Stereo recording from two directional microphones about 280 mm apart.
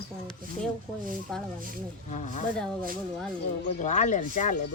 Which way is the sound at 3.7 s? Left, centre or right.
Left.